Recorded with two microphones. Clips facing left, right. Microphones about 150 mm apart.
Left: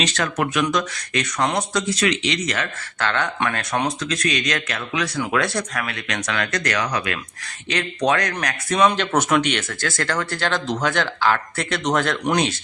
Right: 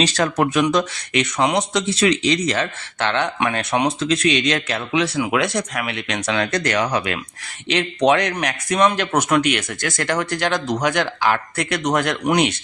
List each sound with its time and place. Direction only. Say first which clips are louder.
0.0 s speech: right 4 dB; 35° right (ahead or behind)
5.1 s speech: right 2 dB; 10° right (ahead or behind)
9.3 s speech: right 2 dB; 10° right (ahead or behind)